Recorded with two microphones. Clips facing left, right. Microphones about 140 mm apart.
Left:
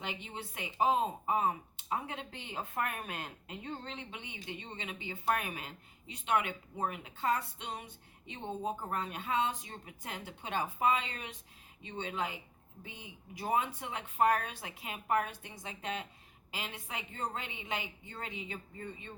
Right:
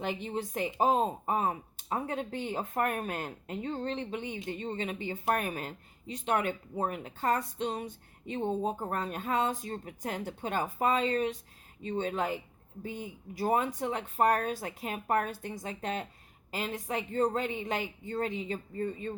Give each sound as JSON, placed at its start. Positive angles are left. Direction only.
{"t": 0.0, "sound": "speech", "side_deg": -45}